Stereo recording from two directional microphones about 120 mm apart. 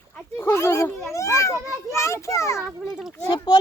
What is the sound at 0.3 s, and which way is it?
A child's voice, 20° left (ahead or behind).